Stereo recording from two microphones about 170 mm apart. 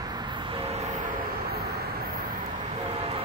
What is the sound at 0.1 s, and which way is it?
Vehicle, 25° right (ahead or behind).